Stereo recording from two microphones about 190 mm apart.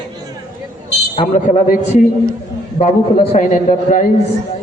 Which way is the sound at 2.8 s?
35° left (ahead or behind).